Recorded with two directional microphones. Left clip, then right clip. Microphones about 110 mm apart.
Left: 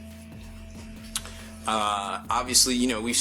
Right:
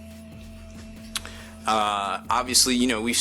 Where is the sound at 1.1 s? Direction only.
15° right (ahead or behind).